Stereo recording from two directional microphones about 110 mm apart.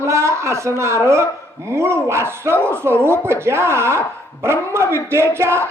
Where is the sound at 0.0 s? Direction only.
25° right (ahead or behind).